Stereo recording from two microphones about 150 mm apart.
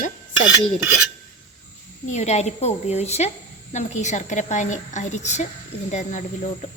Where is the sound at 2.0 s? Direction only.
50° left (ahead or behind).